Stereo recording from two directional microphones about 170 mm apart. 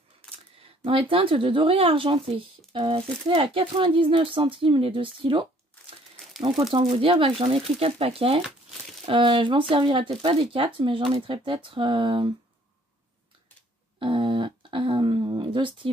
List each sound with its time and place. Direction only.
0.6 s speech: 35° right (ahead or behind)
6.1 s crumpling: centre (ahead or behind)
6.4 s speech: 25° right (ahead or behind)
13.9 s a sound: 30° right (ahead or behind)